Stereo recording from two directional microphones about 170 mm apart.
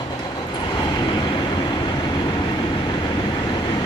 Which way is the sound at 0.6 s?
25° left (ahead or behind).